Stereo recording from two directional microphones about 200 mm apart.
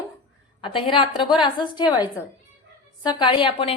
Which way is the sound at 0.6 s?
25° left (ahead or behind).